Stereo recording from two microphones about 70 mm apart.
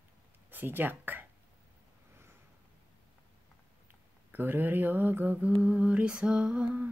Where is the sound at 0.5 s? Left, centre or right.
Right.